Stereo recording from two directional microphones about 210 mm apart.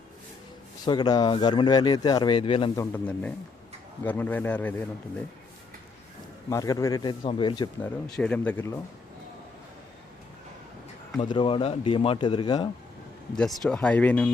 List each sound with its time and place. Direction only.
0.9 s speech: 20° left (ahead or behind)
2.7 s speech: 5° left (ahead or behind)
6.5 s speech: 15° left (ahead or behind)
7.8 s speech: 5° left (ahead or behind)
11.2 s speech: 25° left (ahead or behind)
13.3 s speech: 5° left (ahead or behind)